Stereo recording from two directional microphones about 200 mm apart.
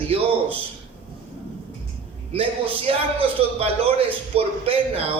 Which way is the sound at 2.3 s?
30° right (ahead or behind).